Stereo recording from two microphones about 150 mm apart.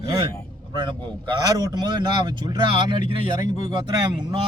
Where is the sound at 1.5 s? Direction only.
25° right (ahead or behind).